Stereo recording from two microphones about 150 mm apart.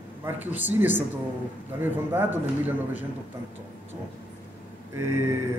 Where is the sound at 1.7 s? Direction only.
15° right (ahead or behind).